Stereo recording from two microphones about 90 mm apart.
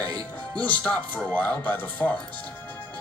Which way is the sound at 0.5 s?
15° left (ahead or behind).